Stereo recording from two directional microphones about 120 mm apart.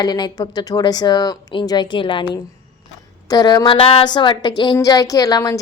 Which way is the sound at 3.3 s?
35° left (ahead or behind).